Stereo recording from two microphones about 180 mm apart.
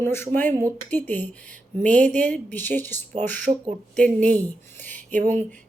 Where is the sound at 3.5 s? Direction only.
35° right (ahead or behind).